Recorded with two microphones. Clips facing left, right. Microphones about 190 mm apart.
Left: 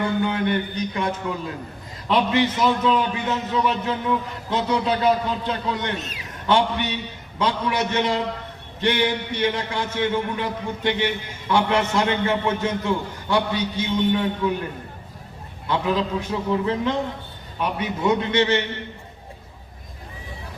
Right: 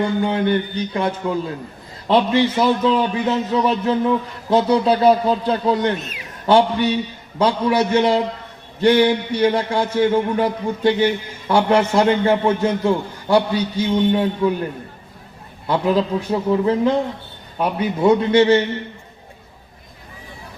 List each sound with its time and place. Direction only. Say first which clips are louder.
0.2 s speech: right 4 dB; 30° right (ahead or behind)
15.6 s speech: right 5 dB; 35° right (ahead or behind)